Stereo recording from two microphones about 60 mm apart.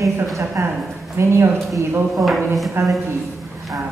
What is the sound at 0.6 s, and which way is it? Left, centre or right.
Speech, right.